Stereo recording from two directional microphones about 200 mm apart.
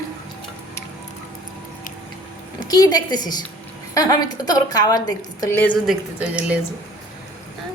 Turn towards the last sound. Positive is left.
turn(degrees=-5)  # may be behind; listen again after turning